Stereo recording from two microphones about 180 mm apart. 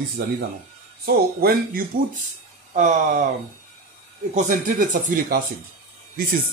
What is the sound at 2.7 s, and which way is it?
Speech, 45° right (ahead or behind).